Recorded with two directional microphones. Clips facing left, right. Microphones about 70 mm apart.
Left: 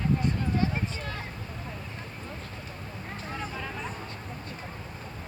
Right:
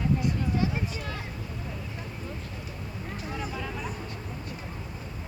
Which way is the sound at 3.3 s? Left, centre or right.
Left.